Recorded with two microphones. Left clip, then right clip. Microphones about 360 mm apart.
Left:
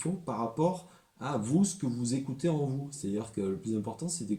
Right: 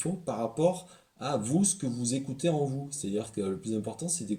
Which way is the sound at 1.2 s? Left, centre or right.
Centre.